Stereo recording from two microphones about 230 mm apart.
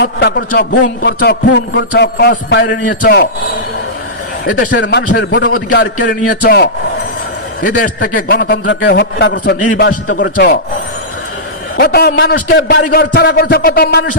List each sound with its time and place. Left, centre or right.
0.0 s a man's voice: left
4.7 s a man's voice: left
11.8 s a man's voice: left